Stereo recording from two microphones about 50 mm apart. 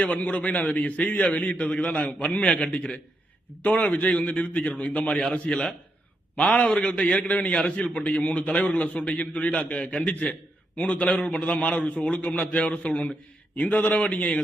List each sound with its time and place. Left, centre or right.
0.0 s a man's voice: left